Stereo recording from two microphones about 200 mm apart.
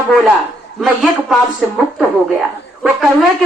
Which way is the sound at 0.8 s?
Centre (ahead or behind).